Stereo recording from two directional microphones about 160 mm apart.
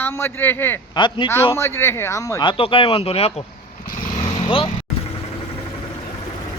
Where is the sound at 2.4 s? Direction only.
35° left (ahead or behind).